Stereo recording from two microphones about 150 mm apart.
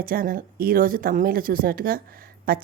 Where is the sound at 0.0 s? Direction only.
75° right (ahead or behind).